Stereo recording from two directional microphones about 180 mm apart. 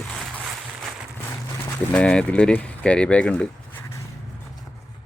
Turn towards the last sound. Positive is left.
turn(degrees=5)  # may be behind; listen again after turning